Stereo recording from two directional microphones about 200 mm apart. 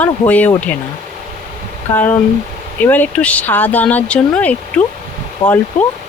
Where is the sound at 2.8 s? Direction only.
10° left (ahead or behind).